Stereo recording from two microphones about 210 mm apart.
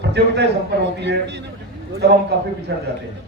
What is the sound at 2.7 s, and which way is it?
Speech, 55° right (ahead or behind).